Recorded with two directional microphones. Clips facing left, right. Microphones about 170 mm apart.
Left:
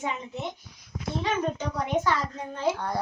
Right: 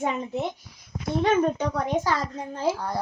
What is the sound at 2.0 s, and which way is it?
Speech, 35° right (ahead or behind).